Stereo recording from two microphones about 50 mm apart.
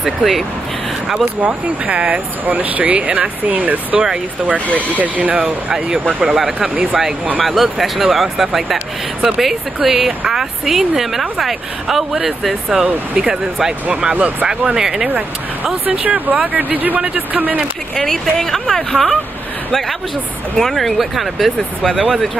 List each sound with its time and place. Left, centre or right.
0.0 s speech: centre
1.4 s speech: right
2.4 s speech: right
5.4 s speech: centre
6.7 s speech: right
7.4 s speech: centre
14.1 s speech: right
14.5 s speech: centre
15.1 s speech: right
17.9 s speech: centre
20.5 s speech: centre